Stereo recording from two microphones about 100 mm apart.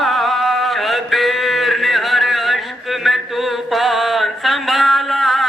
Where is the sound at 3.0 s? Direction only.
Centre (ahead or behind).